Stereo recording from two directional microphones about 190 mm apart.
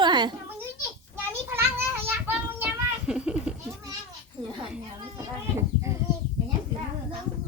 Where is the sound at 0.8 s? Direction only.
10° right (ahead or behind).